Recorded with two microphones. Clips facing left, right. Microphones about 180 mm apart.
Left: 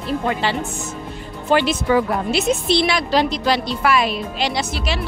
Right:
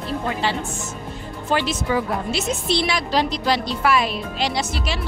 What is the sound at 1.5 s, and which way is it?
A woman's voice, 65° left (ahead or behind).